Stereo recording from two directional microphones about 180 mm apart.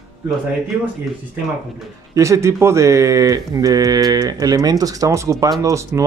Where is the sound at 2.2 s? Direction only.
15° right (ahead or behind).